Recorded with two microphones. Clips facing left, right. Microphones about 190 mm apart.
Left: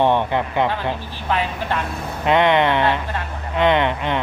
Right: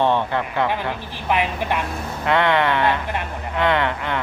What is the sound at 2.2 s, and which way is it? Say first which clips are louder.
Speech: left 3 dB; 20° left (ahead or behind).